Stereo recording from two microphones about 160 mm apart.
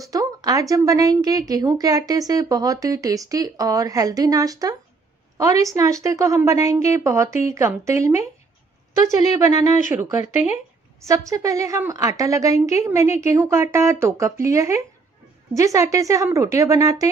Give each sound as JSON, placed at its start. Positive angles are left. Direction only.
{"t": 0.0, "sound": "a woman's voice", "side_deg": -20}
{"t": 10.2, "sound": "speech", "side_deg": 45}
{"t": 11.1, "sound": "a woman's voice", "side_deg": -20}